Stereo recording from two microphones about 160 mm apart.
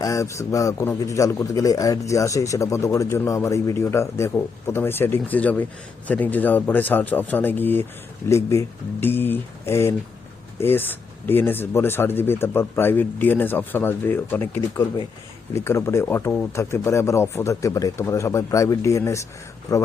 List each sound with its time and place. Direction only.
0.0 s a man's voice: 20° left (ahead or behind)